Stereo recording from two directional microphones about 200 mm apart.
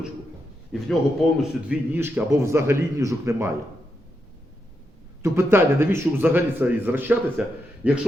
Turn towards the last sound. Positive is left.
turn(degrees=-5)  # may be behind; listen again after turning